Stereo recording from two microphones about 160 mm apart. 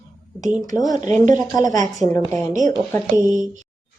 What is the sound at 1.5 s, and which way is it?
Speech, 20° left (ahead or behind).